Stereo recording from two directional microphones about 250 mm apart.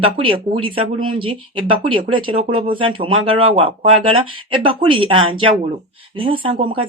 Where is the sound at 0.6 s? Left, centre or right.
Right.